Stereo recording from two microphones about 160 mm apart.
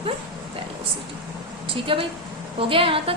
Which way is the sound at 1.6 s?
35° right (ahead or behind).